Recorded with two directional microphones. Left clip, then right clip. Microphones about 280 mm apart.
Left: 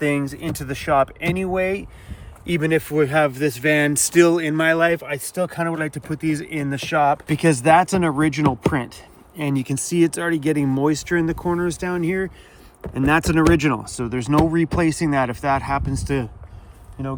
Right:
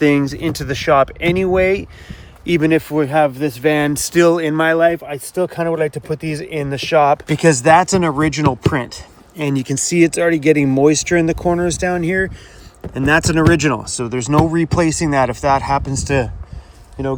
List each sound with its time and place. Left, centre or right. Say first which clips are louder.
0.0 s speech: right 7 dB; right
2.6 s speech: right 3 dB; centre
7.3 s speech: right 5 dB; centre